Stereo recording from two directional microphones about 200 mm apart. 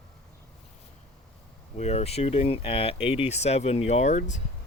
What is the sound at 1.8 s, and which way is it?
Speech, 35° left (ahead or behind).